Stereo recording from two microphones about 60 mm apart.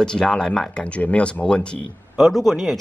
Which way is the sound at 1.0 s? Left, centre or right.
Left.